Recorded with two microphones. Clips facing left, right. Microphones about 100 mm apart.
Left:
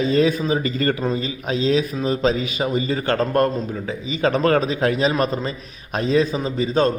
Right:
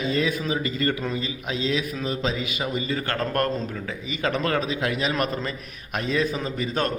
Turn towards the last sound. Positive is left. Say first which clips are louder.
# left 7 dB
turn(degrees=25)  # may be behind; listen again after turning